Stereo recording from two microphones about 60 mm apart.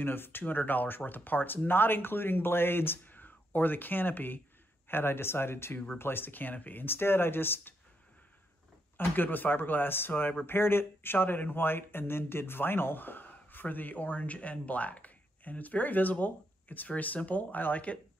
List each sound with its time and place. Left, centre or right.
0.0 s speech: left
8.9 s speech: left